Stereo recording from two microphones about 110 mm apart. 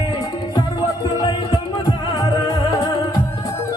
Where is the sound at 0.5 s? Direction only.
50° left (ahead or behind).